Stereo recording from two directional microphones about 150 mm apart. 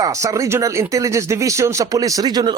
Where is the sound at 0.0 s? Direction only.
20° right (ahead or behind).